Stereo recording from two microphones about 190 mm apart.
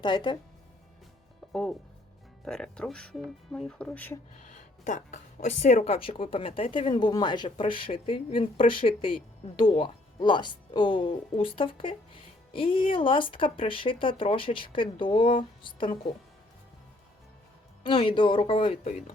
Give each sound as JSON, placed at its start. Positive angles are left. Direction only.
{"t": 0.0, "sound": "speech", "side_deg": 25}
{"t": 2.4, "sound": "speech", "side_deg": 5}
{"t": 4.4, "sound": "speech", "side_deg": 40}
{"t": 17.8, "sound": "speech", "side_deg": 25}